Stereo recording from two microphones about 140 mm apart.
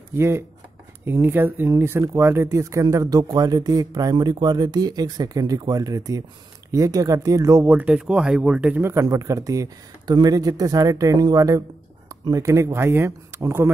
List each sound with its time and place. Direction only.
0.1 s speech: 20° right (ahead or behind)
8.8 s speech: 20° right (ahead or behind)